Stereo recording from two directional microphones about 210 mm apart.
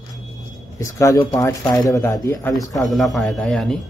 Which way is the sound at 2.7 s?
Centre (ahead or behind).